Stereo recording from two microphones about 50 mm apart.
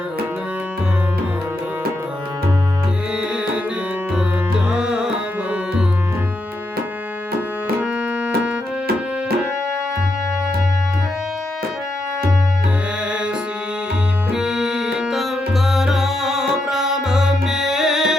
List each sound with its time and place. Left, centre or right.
4.7 s tabla: centre
14.3 s music: centre